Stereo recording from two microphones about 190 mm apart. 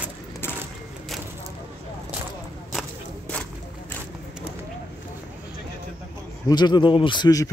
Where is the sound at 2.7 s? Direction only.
5° left (ahead or behind).